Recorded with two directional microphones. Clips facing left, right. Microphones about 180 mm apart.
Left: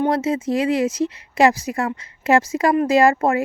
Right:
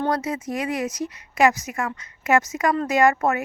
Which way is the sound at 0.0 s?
25° left (ahead or behind).